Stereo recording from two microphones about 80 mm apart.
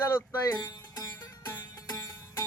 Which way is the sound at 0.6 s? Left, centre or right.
Left.